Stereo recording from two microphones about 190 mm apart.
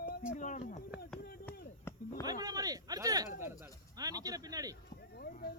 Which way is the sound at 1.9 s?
10° left (ahead or behind).